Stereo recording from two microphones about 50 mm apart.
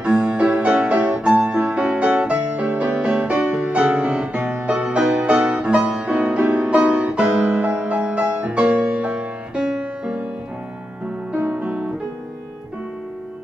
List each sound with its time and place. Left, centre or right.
0.0 s music: right
11.3 s music: right